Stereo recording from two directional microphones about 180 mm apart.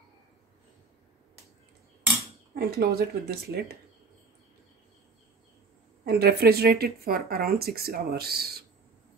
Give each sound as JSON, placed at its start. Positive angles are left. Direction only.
{"t": 2.5, "sound": "speech", "side_deg": -60}
{"t": 6.0, "sound": "speech", "side_deg": -60}